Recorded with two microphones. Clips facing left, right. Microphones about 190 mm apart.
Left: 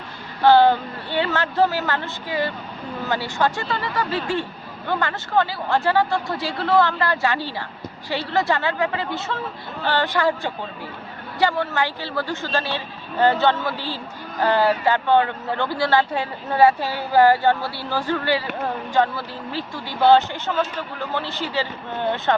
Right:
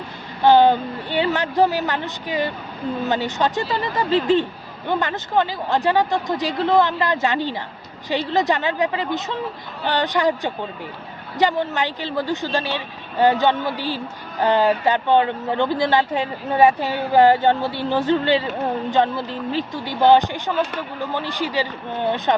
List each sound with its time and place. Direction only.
0.4 s a man's voice: 15° right (ahead or behind)